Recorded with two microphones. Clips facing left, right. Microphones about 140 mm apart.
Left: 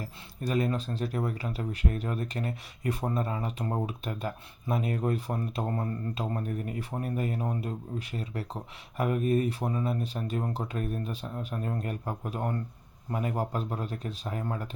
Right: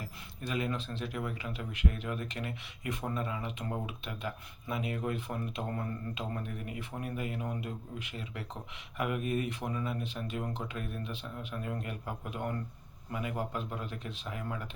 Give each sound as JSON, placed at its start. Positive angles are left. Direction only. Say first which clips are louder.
{"t": 0.0, "sound": "speech", "louder": "left 6 dB", "side_deg": 40}